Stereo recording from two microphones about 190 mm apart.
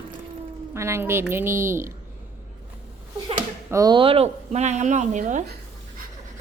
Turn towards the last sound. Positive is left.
turn(degrees=-40)  # may be behind; listen again after turning